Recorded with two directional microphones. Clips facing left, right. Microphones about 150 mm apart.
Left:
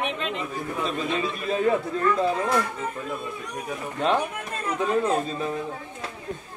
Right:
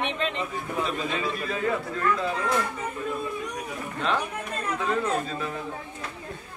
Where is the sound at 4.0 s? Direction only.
20° left (ahead or behind).